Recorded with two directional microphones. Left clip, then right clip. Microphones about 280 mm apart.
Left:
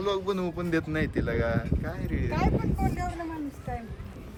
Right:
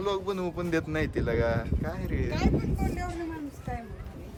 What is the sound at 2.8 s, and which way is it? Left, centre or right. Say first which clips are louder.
Speech: left 2 dB; left.